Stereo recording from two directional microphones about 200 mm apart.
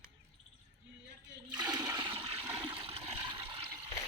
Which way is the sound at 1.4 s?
20° right (ahead or behind).